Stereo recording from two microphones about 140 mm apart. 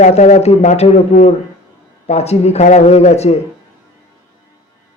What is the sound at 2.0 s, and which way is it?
A man's voice, 50° left (ahead or behind).